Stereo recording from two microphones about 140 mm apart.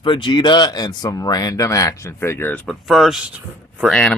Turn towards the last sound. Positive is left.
turn(degrees=10)  # may be behind; listen again after turning